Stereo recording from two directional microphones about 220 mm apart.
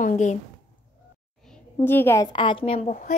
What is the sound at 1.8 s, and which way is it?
A woman's voice, 10° left (ahead or behind).